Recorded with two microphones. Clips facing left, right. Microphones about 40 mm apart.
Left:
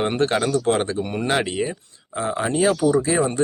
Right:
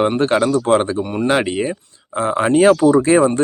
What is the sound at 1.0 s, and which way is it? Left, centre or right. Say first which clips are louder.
Speech: right 6 dB; centre.